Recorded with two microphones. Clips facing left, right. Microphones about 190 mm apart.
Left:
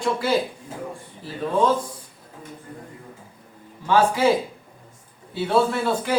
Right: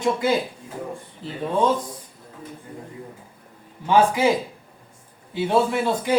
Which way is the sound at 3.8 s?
15° right (ahead or behind).